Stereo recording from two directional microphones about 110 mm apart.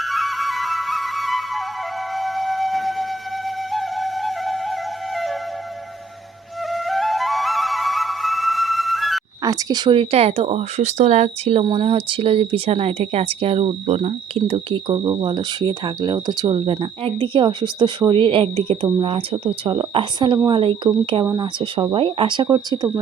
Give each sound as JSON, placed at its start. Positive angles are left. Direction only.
{"t": 0.0, "sound": "flute", "side_deg": 0}
{"t": 2.1, "sound": "siren", "side_deg": 0}
{"t": 3.7, "sound": "music", "side_deg": 0}
{"t": 6.7, "sound": "music", "side_deg": 0}
{"t": 9.4, "sound": "speech", "side_deg": -35}
{"t": 11.7, "sound": "speech", "side_deg": -55}
{"t": 16.6, "sound": "speech", "side_deg": -55}
{"t": 22.4, "sound": "speech", "side_deg": -35}